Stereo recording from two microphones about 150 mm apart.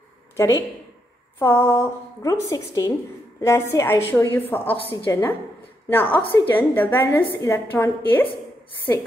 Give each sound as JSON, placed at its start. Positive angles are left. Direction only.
{"t": 0.4, "sound": "a woman's voice", "side_deg": 20}